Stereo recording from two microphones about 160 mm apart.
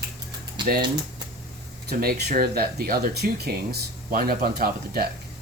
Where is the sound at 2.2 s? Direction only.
65° right (ahead or behind).